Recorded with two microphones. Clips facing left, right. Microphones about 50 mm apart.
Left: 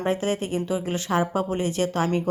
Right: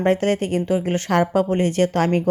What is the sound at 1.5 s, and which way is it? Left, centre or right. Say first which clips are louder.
Speech: right 6 dB; right.